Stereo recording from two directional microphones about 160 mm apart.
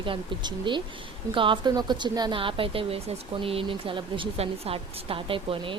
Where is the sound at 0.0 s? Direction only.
30° right (ahead or behind).